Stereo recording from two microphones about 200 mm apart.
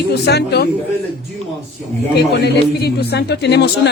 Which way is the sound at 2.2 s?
55° left (ahead or behind).